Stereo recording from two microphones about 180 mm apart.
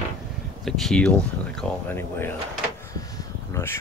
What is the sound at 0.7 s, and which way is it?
Speech, centre (ahead or behind).